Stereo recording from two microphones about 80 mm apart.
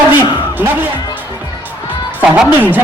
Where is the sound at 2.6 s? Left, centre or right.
Right.